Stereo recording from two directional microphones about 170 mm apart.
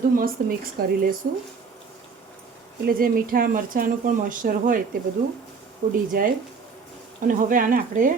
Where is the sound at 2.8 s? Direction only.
60° right (ahead or behind).